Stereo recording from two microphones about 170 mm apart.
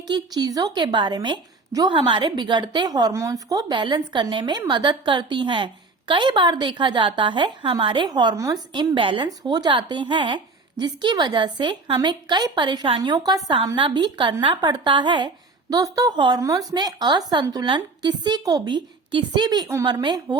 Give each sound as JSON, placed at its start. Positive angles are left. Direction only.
{"t": 0.1, "sound": "a woman's voice", "side_deg": -25}